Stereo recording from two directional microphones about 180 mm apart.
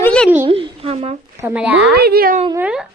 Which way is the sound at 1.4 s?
10° right (ahead or behind).